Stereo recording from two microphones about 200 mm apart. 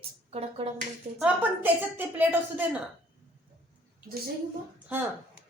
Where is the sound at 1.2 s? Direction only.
10° right (ahead or behind).